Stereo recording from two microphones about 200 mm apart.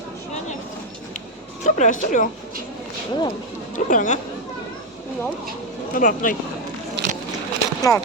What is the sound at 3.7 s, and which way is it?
Speech, 40° left (ahead or behind).